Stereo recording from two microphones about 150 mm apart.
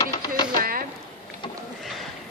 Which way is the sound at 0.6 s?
70° right (ahead or behind).